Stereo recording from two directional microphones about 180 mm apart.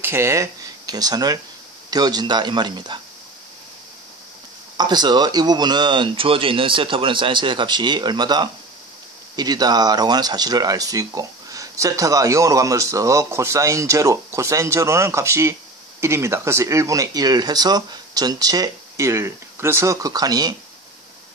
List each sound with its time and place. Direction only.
0.0 s speech: 15° right (ahead or behind)
4.7 s speech: 25° right (ahead or behind)